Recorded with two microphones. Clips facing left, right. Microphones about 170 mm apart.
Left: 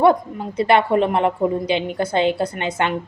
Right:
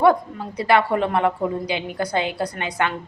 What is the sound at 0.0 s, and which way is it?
A woman's voice, 25° left (ahead or behind).